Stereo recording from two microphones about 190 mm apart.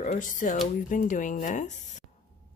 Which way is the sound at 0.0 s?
40° left (ahead or behind).